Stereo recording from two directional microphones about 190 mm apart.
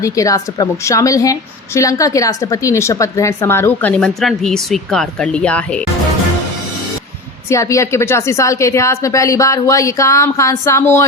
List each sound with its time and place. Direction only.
0.0 s a woman's voice: 15° left (ahead or behind)
7.5 s a woman's voice: 15° left (ahead or behind)